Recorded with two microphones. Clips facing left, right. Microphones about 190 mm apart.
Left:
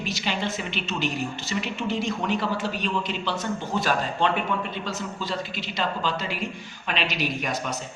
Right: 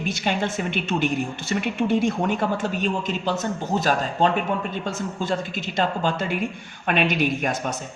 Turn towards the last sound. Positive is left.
turn(degrees=-50)  # may be behind; listen again after turning